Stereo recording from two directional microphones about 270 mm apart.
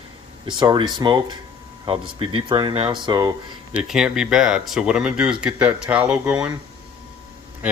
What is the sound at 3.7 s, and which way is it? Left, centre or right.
Speech, centre.